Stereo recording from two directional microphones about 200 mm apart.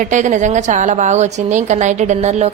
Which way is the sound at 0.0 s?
40° right (ahead or behind).